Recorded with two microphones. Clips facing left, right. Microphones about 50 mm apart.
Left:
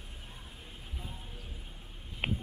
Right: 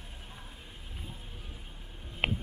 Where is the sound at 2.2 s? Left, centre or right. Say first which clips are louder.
Right 3 dB; right.